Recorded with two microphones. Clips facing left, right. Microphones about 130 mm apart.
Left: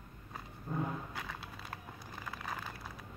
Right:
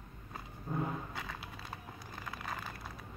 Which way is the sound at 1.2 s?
Centre (ahead or behind).